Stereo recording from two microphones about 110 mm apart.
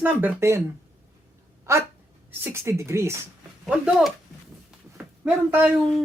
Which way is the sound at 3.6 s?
5° right (ahead or behind).